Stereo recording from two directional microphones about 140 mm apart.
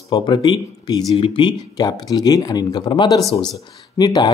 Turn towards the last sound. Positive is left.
turn(degrees=30)  # may be behind; listen again after turning